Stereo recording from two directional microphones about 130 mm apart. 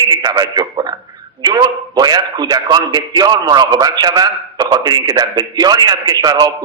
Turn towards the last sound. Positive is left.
turn(degrees=-30)  # may be behind; listen again after turning